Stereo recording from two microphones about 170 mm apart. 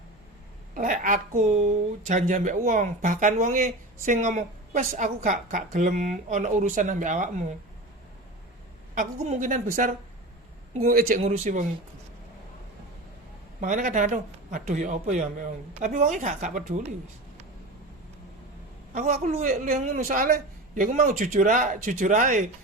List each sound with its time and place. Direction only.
0.7 s a man's voice: 50° right (ahead or behind)
9.0 s a man's voice: 45° right (ahead or behind)
13.6 s a man's voice: 50° right (ahead or behind)
18.9 s a man's voice: 45° right (ahead or behind)